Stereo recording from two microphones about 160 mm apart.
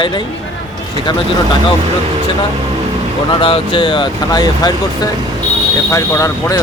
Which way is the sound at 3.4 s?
30° left (ahead or behind).